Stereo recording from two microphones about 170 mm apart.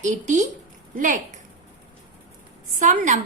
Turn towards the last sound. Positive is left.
turn(degrees=-50)  # may be behind; listen again after turning